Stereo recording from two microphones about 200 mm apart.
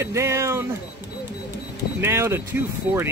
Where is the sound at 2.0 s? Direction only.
10° right (ahead or behind).